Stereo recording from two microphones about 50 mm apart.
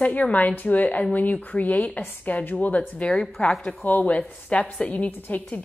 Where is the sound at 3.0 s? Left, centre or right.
Centre.